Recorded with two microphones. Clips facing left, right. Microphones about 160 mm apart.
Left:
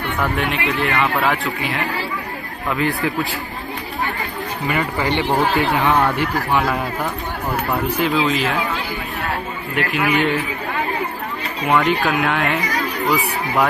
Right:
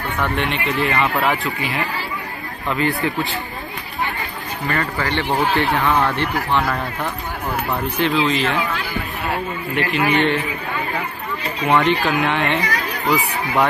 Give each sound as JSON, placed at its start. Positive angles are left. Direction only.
{"t": 0.2, "sound": "speech", "side_deg": 5}
{"t": 4.7, "sound": "speech", "side_deg": 15}
{"t": 5.4, "sound": "speech", "side_deg": 0}
{"t": 9.7, "sound": "speech", "side_deg": 5}
{"t": 11.7, "sound": "speech", "side_deg": 0}